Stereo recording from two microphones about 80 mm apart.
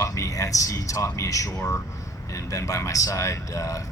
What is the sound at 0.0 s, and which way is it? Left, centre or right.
A man's voice, left.